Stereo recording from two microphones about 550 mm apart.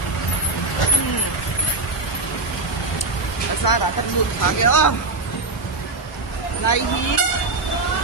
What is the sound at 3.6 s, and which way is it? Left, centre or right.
Speech, left.